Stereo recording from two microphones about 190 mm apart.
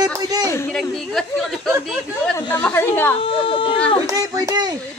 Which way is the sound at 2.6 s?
10° left (ahead or behind).